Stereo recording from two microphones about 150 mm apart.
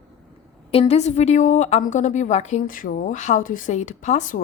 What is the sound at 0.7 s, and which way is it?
A woman's voice, 40° left (ahead or behind).